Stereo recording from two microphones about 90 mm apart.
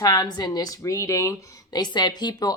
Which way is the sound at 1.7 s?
50° left (ahead or behind).